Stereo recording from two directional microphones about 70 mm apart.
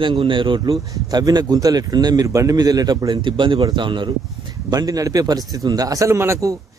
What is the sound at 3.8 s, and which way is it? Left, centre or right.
Speech, right.